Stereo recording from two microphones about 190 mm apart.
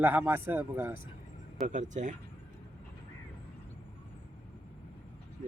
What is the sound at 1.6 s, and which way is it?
Speech, 40° right (ahead or behind).